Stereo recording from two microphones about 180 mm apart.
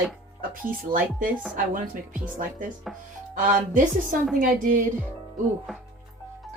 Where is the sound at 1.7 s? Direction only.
50° right (ahead or behind).